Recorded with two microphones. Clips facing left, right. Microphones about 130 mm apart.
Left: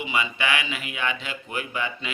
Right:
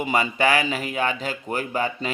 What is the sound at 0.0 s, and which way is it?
Speech, 45° right (ahead or behind).